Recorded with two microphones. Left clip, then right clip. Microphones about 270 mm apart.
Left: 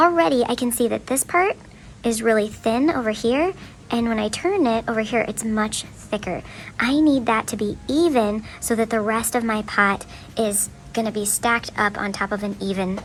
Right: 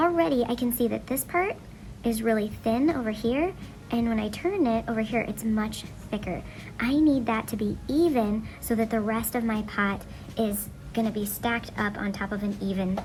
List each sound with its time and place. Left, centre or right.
0.0 s speech: centre